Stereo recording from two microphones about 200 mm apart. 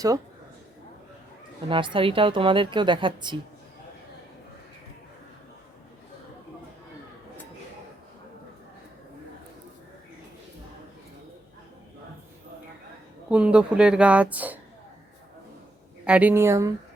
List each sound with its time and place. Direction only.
1.7 s a woman's voice: 25° right (ahead or behind)
13.3 s a woman's voice: 5° right (ahead or behind)
16.0 s speech: 5° right (ahead or behind)